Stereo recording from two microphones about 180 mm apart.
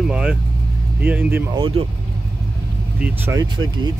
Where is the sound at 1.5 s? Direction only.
25° right (ahead or behind).